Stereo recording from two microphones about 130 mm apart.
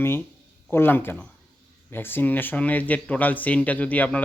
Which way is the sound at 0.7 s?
15° left (ahead or behind).